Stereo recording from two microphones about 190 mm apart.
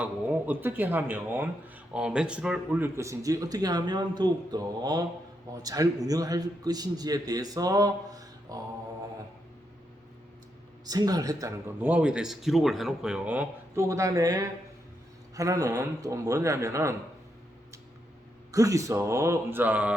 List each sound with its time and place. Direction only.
0.0 s a man's voice: 10° right (ahead or behind)
10.8 s speech: 20° right (ahead or behind)
18.5 s speech: 15° right (ahead or behind)